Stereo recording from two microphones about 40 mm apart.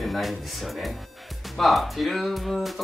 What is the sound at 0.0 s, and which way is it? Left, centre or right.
Speech, centre.